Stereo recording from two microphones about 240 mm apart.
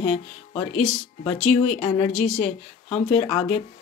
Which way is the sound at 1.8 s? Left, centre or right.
Left.